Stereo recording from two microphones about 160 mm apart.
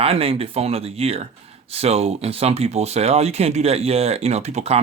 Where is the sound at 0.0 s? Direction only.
35° right (ahead or behind).